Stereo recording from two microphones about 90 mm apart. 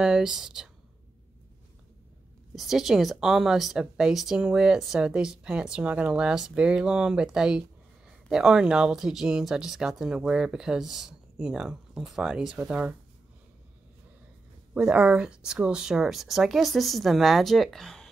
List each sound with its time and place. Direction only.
0.0 s speech: 5° right (ahead or behind)
2.5 s speech: centre (ahead or behind); by 12.9 s 15° right (ahead or behind)
14.7 s speech: 10° right (ahead or behind); by 18.1 s 5° left (ahead or behind)